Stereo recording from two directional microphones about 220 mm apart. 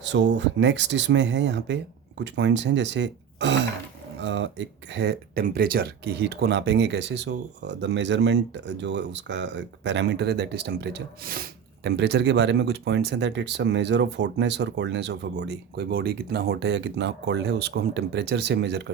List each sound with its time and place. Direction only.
0.0 s speech: 55° right (ahead or behind)